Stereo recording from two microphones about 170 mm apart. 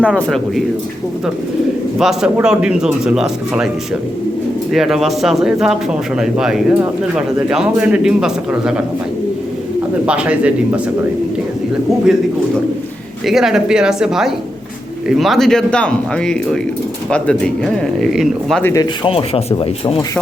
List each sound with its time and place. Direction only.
0.0 s speech: centre (ahead or behind)
2.0 s speech: 5° right (ahead or behind)
4.7 s speech: centre (ahead or behind)
10.1 s speech: 5° right (ahead or behind)
13.2 s speech: centre (ahead or behind)
18.6 s speech: 20° left (ahead or behind)
19.0 s speech: 35° left (ahead or behind)